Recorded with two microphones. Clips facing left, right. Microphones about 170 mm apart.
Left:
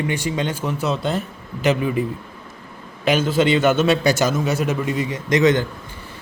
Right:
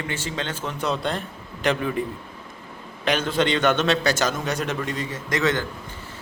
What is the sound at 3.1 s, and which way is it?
A man's voice, 5° left (ahead or behind).